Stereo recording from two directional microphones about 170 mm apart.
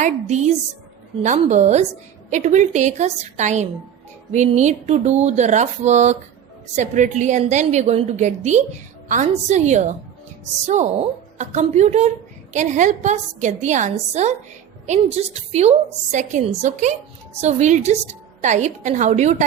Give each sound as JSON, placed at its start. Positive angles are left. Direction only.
{"t": 0.0, "sound": "a woman's voice", "side_deg": -40}